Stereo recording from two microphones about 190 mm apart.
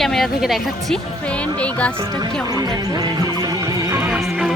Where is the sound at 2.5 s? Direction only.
20° right (ahead or behind).